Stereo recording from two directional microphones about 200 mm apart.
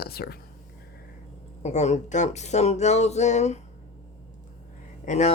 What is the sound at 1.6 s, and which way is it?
Speech, 35° left (ahead or behind).